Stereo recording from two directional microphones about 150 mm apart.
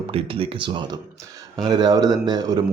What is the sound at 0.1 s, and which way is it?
Speech, 40° right (ahead or behind).